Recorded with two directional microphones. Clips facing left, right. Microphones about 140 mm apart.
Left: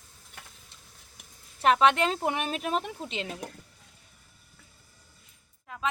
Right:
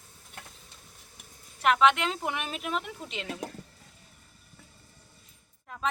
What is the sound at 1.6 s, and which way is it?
A woman's voice, 35° left (ahead or behind).